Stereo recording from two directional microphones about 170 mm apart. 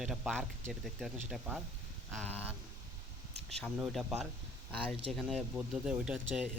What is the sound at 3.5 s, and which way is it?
Speech, centre (ahead or behind).